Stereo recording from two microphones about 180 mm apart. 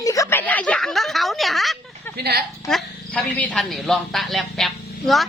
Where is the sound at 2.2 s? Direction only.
60° right (ahead or behind).